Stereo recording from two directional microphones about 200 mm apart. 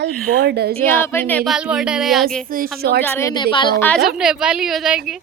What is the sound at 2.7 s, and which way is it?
Speech, 50° right (ahead or behind).